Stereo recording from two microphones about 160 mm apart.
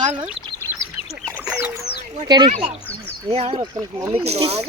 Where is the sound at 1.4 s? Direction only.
10° right (ahead or behind).